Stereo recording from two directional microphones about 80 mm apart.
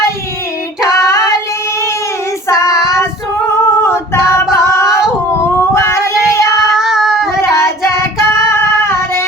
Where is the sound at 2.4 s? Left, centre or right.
Left.